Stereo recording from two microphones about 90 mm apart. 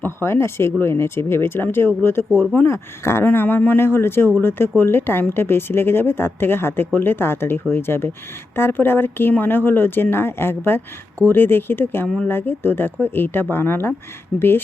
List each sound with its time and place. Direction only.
0.0 s a woman's voice: 25° left (ahead or behind)
2.3 s speech: 5° left (ahead or behind)
2.6 s a woman's voice: 30° left (ahead or behind)
12.0 s speech: 10° left (ahead or behind)
12.3 s a woman's voice: 25° left (ahead or behind)